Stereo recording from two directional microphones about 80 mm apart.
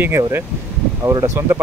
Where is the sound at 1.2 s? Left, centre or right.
Right.